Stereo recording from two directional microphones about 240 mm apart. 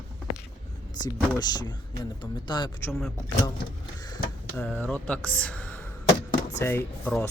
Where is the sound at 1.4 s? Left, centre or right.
Centre.